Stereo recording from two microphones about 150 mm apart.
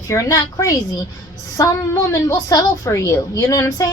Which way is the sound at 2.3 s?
25° left (ahead or behind).